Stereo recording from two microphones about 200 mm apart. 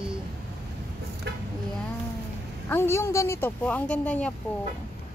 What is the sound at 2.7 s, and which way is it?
Speech, 10° left (ahead or behind).